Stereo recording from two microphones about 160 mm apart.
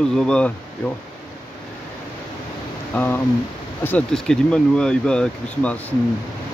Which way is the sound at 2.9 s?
10° left (ahead or behind).